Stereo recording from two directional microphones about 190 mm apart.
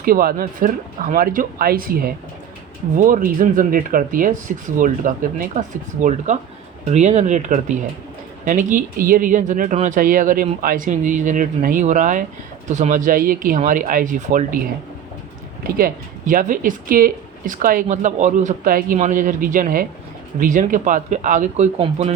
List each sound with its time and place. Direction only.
0.0 s speech: 50° right (ahead or behind)
15.6 s speech: 50° right (ahead or behind); by 22.1 s 35° right (ahead or behind)